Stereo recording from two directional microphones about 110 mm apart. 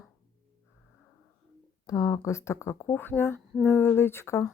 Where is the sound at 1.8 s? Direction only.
30° left (ahead or behind).